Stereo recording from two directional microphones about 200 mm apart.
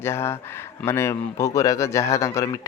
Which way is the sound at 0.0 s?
10° left (ahead or behind).